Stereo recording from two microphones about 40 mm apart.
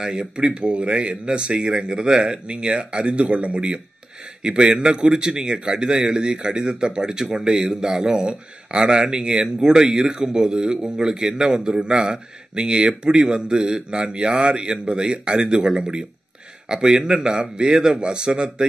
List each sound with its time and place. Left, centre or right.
0.0 s a man's voice: right